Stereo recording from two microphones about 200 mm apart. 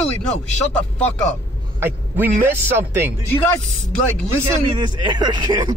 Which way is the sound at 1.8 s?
10° right (ahead or behind).